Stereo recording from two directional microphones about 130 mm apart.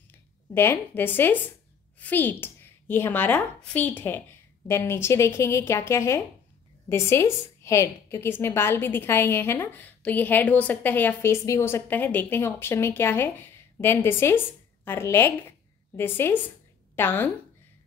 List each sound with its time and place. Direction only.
0.1 s a woman's voice: 15° left (ahead or behind)